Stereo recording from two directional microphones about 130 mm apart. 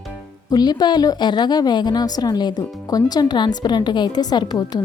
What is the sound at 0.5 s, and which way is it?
A woman's voice, 30° left (ahead or behind).